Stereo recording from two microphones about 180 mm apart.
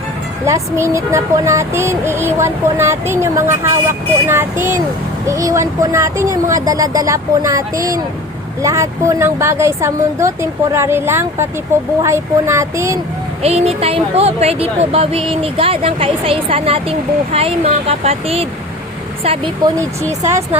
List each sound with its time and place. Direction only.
0.4 s speech: 15° right (ahead or behind)
13.4 s speech: 35° right (ahead or behind)